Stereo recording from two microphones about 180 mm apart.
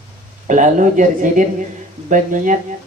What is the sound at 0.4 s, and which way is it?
Speech, 45° right (ahead or behind).